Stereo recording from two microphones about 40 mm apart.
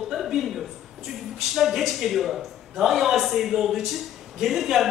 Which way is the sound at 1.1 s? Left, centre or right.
Centre.